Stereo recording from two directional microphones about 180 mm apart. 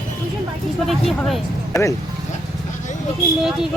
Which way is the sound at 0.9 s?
Centre (ahead or behind).